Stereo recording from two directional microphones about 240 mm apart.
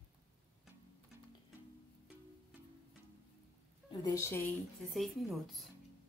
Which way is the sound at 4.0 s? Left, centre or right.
Centre.